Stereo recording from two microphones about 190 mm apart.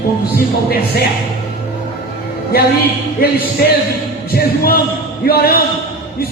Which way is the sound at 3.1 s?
55° left (ahead or behind).